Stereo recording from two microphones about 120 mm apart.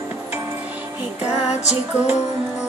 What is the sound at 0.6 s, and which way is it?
Music, 10° right (ahead or behind).